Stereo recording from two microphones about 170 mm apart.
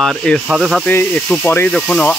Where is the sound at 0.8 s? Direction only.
10° left (ahead or behind).